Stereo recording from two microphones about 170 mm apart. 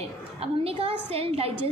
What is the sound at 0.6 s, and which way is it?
Speech, 35° right (ahead or behind).